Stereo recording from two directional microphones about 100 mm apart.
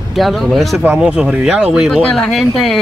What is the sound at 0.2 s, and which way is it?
Speech, centre (ahead or behind).